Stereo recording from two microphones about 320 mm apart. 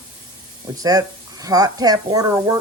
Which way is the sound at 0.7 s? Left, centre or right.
Centre.